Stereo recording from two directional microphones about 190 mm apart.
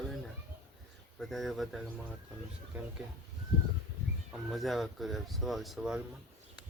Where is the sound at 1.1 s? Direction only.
Centre (ahead or behind).